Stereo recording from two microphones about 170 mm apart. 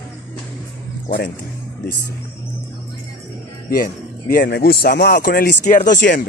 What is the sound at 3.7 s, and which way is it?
Speech, 60° left (ahead or behind).